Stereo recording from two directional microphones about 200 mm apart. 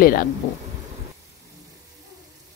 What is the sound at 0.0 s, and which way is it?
Speech, 45° left (ahead or behind).